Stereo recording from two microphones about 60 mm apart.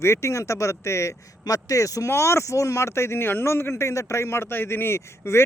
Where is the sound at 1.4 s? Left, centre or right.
Left.